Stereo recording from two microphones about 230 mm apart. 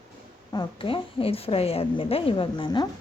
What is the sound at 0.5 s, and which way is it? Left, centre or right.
A woman's voice, left.